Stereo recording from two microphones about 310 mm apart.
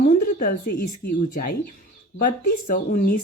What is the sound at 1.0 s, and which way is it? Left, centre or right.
Speech, left.